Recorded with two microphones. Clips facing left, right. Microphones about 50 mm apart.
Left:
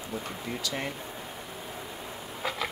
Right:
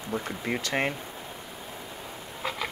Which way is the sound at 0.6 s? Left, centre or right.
Right.